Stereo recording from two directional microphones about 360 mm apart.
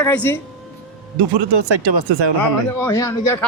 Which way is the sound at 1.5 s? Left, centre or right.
Right.